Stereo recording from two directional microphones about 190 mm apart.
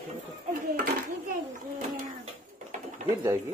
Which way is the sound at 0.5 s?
45° right (ahead or behind).